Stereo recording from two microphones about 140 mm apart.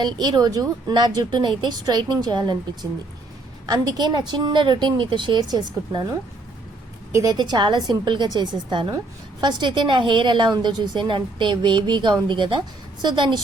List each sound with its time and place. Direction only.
0.0 s a woman's voice: 30° right (ahead or behind)
3.7 s a woman's voice: 30° right (ahead or behind)
7.1 s a woman's voice: 25° right (ahead or behind)